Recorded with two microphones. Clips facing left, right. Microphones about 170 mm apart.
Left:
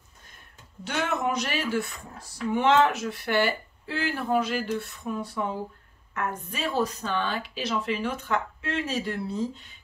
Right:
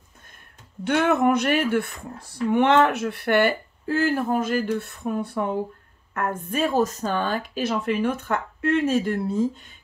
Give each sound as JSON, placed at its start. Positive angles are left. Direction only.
{"t": 0.8, "sound": "speech", "side_deg": -55}